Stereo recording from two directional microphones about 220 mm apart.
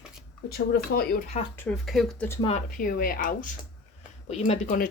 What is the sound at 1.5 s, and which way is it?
Speech, 5° left (ahead or behind).